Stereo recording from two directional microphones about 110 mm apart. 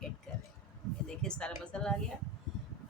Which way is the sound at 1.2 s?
5° left (ahead or behind).